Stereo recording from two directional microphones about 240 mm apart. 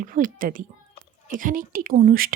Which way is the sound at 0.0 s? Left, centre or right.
Right.